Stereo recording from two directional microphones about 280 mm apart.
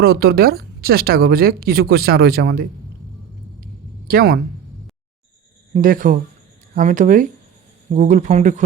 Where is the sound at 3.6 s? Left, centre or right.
Right.